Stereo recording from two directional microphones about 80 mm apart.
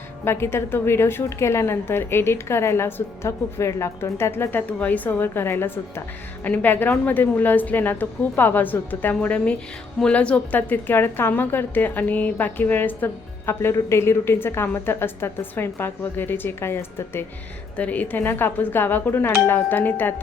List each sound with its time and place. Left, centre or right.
0.3 s a woman's voice: left
17.7 s a woman's voice: centre